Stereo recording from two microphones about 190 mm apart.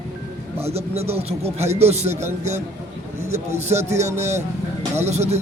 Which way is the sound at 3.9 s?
35° right (ahead or behind).